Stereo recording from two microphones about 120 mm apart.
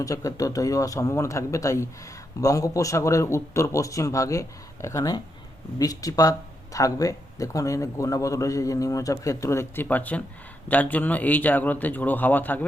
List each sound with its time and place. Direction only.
0.0 s a man's voice: 30° left (ahead or behind)